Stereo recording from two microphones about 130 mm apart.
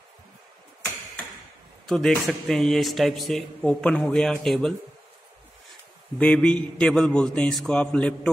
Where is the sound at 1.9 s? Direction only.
5° left (ahead or behind).